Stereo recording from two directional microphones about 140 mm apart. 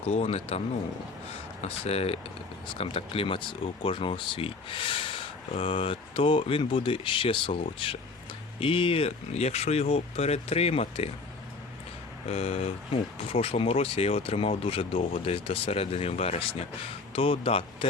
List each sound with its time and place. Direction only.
0.0 s speech: 45° left (ahead or behind)
1.6 s speech: 45° left (ahead or behind)
12.3 s speech: 45° left (ahead or behind)